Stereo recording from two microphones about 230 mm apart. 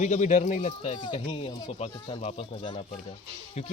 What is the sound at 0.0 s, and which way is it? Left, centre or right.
Speech, left.